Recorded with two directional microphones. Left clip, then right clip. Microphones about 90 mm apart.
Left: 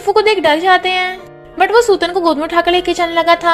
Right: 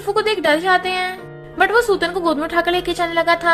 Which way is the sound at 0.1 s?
40° left (ahead or behind).